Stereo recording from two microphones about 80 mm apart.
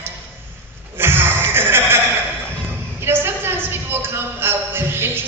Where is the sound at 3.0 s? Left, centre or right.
Right.